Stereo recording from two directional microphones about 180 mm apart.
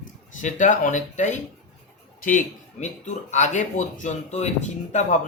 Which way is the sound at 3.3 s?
40° left (ahead or behind).